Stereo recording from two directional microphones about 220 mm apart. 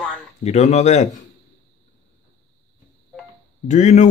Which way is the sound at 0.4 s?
30° left (ahead or behind).